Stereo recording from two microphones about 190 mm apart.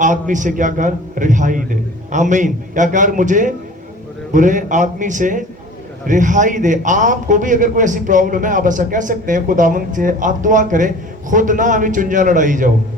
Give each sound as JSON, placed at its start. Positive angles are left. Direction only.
{"t": 0.0, "sound": "a man's voice", "side_deg": -40}